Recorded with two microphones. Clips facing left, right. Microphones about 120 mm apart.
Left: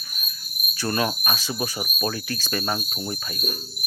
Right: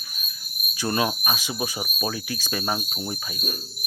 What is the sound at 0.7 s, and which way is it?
Speech, 15° right (ahead or behind).